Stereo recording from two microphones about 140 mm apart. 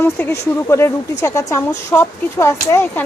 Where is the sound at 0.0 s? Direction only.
15° left (ahead or behind).